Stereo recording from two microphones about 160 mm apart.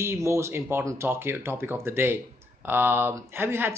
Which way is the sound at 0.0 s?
20° right (ahead or behind).